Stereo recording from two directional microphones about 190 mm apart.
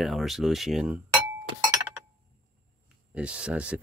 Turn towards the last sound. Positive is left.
turn(degrees=-5)  # may be behind; listen again after turning